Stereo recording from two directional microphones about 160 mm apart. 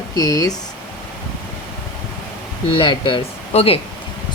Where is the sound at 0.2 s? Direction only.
25° left (ahead or behind).